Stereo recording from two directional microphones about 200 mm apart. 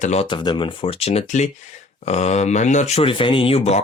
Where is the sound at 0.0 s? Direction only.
30° left (ahead or behind).